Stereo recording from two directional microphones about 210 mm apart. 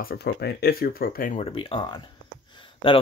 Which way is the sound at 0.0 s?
50° left (ahead or behind).